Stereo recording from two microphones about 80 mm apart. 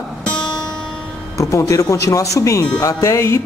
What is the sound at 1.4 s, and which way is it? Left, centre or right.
Speech, left.